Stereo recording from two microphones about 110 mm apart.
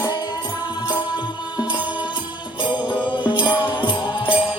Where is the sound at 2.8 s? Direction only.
45° left (ahead or behind).